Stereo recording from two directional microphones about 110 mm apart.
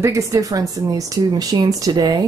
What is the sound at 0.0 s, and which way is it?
Speech, 25° right (ahead or behind).